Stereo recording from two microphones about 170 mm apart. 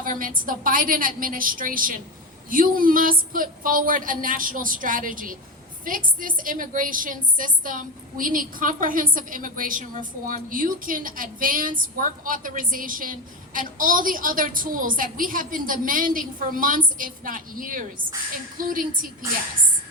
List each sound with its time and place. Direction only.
0.0 s a woman's voice: 55° right (ahead or behind)